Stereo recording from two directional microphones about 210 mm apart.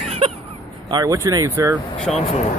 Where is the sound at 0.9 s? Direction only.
15° right (ahead or behind).